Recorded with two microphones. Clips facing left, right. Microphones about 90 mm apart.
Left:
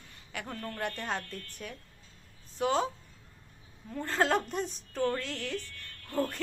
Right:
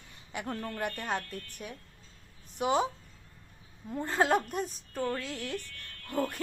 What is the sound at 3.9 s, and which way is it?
A woman's voice, 15° right (ahead or behind).